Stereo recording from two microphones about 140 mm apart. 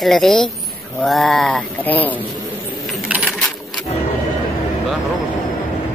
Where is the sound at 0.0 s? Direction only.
Centre (ahead or behind).